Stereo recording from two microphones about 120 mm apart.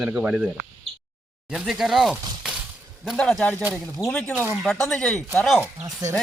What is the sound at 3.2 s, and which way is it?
Speech, 5° left (ahead or behind).